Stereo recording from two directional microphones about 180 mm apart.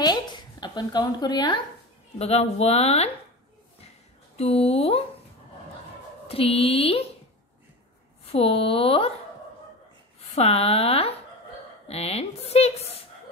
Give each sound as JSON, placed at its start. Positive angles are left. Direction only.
{"t": 0.0, "sound": "a sound", "side_deg": 25}
{"t": 2.1, "sound": "a woman's voice", "side_deg": 35}
{"t": 4.4, "sound": "a woman's voice", "side_deg": 35}
{"t": 6.2, "sound": "a woman's voice", "side_deg": 30}
{"t": 8.3, "sound": "a woman's voice", "side_deg": 30}
{"t": 10.3, "sound": "a woman's voice", "side_deg": 35}